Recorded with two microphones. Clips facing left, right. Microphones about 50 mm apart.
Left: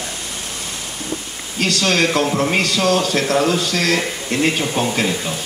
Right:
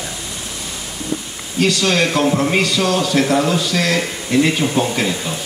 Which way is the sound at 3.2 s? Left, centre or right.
Right.